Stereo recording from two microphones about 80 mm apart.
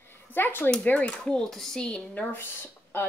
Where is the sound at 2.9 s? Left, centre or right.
Left.